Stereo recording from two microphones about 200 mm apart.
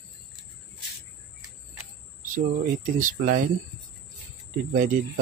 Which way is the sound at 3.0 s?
40° right (ahead or behind).